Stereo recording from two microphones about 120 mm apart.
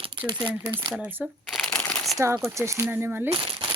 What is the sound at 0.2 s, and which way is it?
Speech, 40° right (ahead or behind).